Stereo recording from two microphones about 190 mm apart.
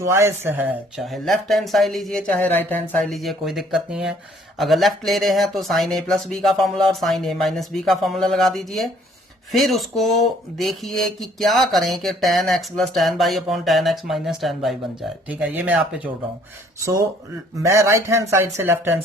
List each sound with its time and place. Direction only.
0.0 s speech: 15° right (ahead or behind)